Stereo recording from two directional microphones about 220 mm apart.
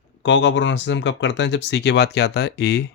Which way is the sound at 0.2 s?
55° left (ahead or behind).